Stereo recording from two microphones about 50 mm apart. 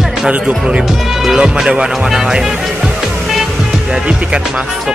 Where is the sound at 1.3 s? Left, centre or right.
Centre.